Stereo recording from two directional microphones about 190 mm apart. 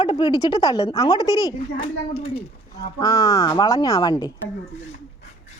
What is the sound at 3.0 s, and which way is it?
A child's voice, 20° left (ahead or behind).